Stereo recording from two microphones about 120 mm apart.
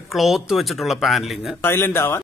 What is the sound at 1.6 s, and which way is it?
Speech, 20° left (ahead or behind).